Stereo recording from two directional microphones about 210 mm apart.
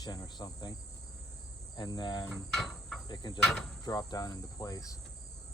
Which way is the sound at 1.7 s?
20° left (ahead or behind).